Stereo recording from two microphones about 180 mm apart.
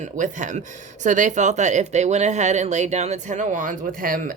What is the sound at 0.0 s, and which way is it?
Speech, 45° right (ahead or behind).